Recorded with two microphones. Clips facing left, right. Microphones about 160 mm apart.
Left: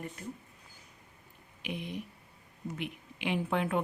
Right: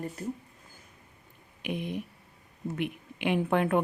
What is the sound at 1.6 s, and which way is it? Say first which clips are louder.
A woman's voice: right 5 dB; 50° right (ahead or behind).